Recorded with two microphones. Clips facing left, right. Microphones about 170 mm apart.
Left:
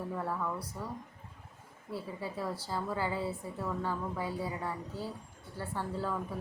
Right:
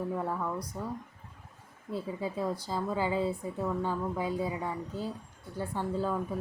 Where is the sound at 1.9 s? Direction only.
20° right (ahead or behind).